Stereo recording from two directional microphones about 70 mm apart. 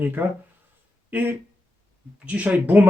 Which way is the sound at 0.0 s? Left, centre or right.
Right.